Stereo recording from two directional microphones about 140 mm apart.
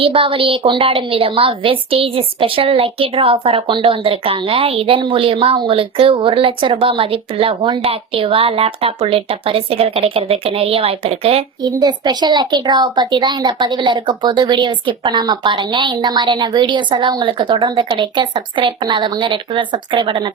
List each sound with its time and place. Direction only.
0.0 s a woman's voice: 40° right (ahead or behind)
11.6 s a woman's voice: 30° right (ahead or behind)